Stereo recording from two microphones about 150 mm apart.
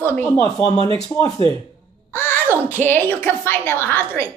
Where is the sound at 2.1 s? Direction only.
15° left (ahead or behind).